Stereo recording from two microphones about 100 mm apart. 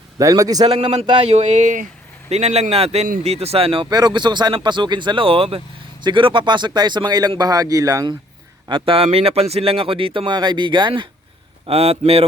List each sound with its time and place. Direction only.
0.2 s a man's voice: 35° right (ahead or behind)
0.7 s a man's voice: 80° right
1.2 s speech: 90° right; by 3.8 s 70° right (ahead or behind)
3.8 s speech: 45° right (ahead or behind)
8.7 s speech: 60° right (ahead or behind)
10.2 s speech: 50° right (ahead or behind)
11.6 s a man's voice: 90° right